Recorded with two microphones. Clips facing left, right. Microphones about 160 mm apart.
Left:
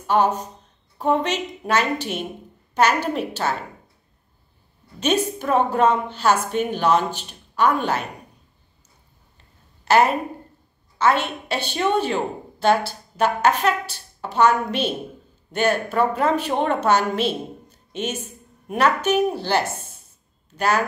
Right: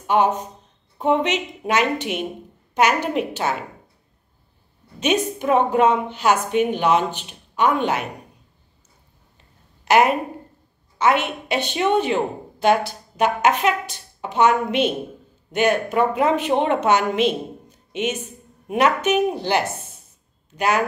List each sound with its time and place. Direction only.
0.0 s a woman's voice: 15° right (ahead or behind)
5.0 s a woman's voice: 15° right (ahead or behind)
9.8 s a woman's voice: 15° right (ahead or behind)